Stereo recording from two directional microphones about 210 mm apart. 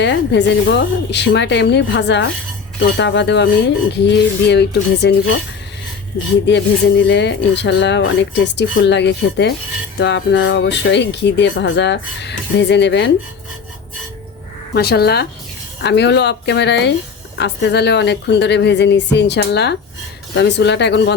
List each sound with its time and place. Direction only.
0.0 s speech: 55° left (ahead or behind)
7.0 s speech: 55° left (ahead or behind)
14.7 s a woman's voice: 50° left (ahead or behind)